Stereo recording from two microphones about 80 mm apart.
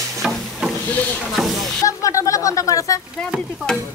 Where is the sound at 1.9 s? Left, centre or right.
Left.